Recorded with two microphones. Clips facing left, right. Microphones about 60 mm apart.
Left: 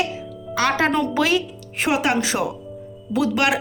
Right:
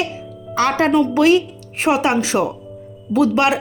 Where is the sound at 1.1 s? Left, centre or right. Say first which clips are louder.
Right 6 dB; right.